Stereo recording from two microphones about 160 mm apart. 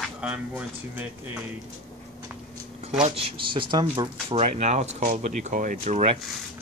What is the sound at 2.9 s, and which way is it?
Speech, 35° right (ahead or behind).